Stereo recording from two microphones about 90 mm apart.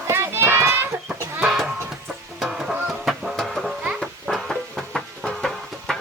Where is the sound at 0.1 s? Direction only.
30° right (ahead or behind).